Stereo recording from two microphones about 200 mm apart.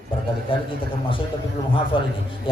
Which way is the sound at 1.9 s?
25° left (ahead or behind).